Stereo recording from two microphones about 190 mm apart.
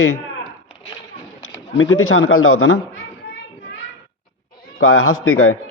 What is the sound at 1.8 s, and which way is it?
A man's voice, 90° left.